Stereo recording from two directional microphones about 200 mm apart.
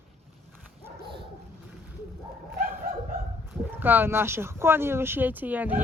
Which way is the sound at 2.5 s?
45° right (ahead or behind).